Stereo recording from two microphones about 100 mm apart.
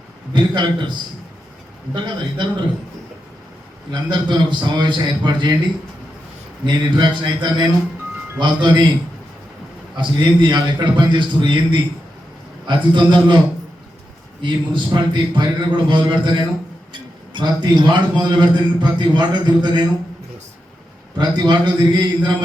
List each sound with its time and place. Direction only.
0.3 s a man's voice: 50° right (ahead or behind)
3.9 s a man's voice: 50° right (ahead or behind)
6.7 s a man's voice: 50° right (ahead or behind)
10.0 s a man's voice: 55° right (ahead or behind)
14.4 s a man's voice: 50° right (ahead or behind)
21.2 s a man's voice: 50° right (ahead or behind)